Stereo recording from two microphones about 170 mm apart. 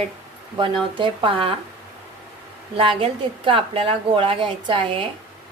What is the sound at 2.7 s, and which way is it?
A woman's voice, 30° right (ahead or behind).